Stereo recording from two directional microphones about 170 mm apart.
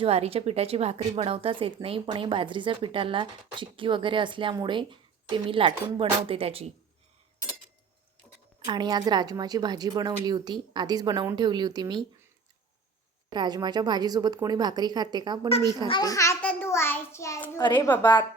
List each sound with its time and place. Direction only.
0.0 s speech: 35° right (ahead or behind)
8.6 s a woman's voice: 25° right (ahead or behind)
13.3 s a woman's voice: 25° right (ahead or behind)
15.9 s a child's voice: 20° left (ahead or behind)
17.6 s a woman's voice: 25° left (ahead or behind)
17.8 s a woman's voice: 10° left (ahead or behind)